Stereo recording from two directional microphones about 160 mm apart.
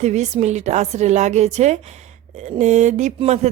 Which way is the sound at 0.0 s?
45° right (ahead or behind).